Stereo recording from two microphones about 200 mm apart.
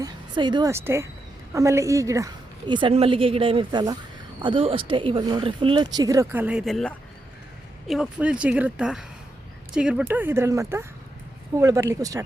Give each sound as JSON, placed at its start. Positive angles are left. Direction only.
{"t": 0.0, "sound": "speech", "side_deg": -20}